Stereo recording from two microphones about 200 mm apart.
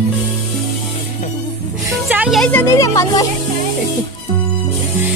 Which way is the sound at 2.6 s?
15° left (ahead or behind).